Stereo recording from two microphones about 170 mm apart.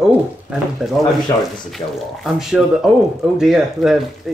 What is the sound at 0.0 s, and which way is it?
Speech, centre (ahead or behind).